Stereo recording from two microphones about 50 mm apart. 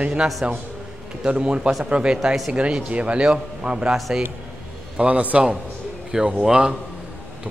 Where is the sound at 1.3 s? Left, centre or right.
Centre.